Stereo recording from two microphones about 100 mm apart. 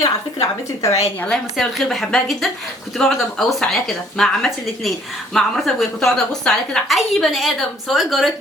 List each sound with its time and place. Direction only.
0.8 s a woman's voice: 30° left (ahead or behind)
1.2 s a woman's voice: 5° left (ahead or behind)